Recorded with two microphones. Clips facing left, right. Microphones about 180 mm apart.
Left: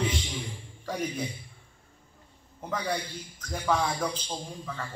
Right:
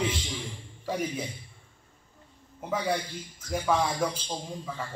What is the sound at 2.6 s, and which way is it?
A man's voice, 10° right (ahead or behind).